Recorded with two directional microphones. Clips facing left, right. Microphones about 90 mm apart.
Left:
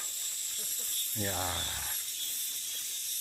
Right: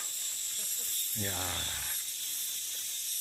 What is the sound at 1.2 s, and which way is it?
Speech, 15° left (ahead or behind).